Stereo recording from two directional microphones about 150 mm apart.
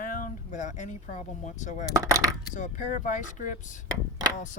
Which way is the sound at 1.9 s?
20° right (ahead or behind).